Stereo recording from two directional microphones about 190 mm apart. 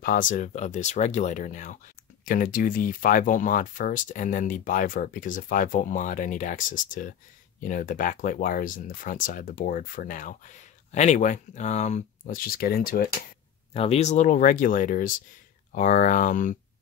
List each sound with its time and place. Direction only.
0.0 s speech: 45° left (ahead or behind)
13.7 s speech: 35° left (ahead or behind)